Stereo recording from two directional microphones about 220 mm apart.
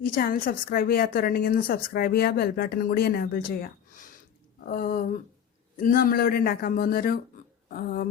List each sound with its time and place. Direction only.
0.0 s a woman's voice: 40° left (ahead or behind)